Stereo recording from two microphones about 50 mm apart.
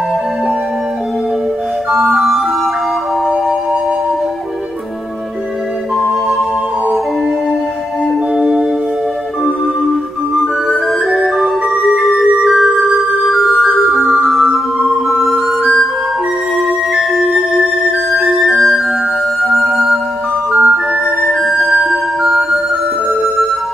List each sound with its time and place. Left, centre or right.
1.9 s music: centre
8.4 s music: centre
10.4 s music: centre
14.0 s music: centre
14.9 s music: centre
17.1 s flute: centre
18.3 s music: centre
20.5 s music: centre
21.3 s music: centre